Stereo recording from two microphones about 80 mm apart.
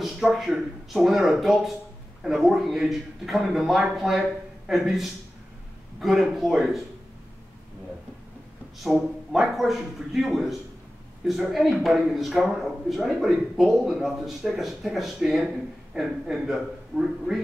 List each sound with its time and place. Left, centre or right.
0.0 s speech: centre
8.8 s speech: centre